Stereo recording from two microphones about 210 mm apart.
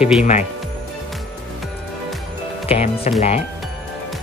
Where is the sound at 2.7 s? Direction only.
30° left (ahead or behind).